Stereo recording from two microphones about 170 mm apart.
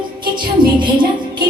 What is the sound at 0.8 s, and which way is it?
Music, 30° right (ahead or behind).